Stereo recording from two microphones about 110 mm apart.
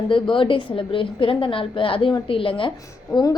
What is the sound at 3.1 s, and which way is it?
Speech, 40° left (ahead or behind).